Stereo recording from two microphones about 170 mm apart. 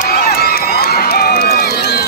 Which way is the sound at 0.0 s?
65° left (ahead or behind).